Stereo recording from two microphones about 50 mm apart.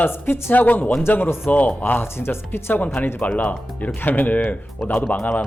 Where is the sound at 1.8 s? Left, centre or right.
Left.